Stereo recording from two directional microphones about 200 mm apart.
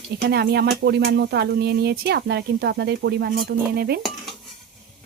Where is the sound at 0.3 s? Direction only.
55° right (ahead or behind).